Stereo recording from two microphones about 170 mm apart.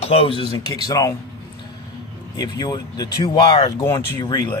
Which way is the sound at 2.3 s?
25° left (ahead or behind).